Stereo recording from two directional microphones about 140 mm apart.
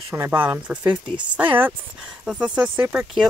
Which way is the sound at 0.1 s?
15° right (ahead or behind).